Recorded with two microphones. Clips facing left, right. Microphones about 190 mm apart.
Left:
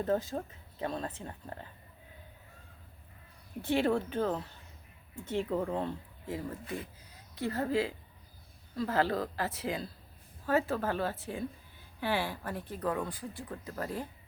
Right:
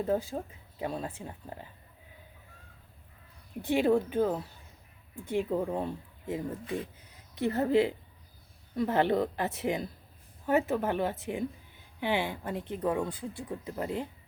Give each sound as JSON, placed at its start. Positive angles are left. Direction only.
{"t": 0.0, "sound": "a woman's voice", "side_deg": -10}
{"t": 3.6, "sound": "a woman's voice", "side_deg": -15}